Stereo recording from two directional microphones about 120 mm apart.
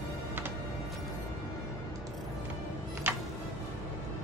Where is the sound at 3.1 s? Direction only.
20° right (ahead or behind).